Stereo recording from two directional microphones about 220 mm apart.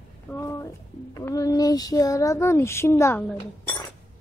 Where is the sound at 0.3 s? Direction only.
10° left (ahead or behind).